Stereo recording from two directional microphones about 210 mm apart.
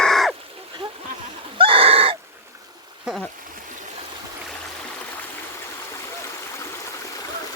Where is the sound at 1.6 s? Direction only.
25° right (ahead or behind).